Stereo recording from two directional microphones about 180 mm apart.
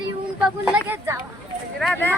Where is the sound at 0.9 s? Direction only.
10° right (ahead or behind).